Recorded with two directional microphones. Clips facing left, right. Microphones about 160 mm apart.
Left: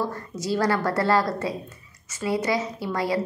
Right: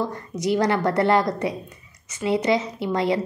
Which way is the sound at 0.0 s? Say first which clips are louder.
Right 3 dB; 20° right (ahead or behind).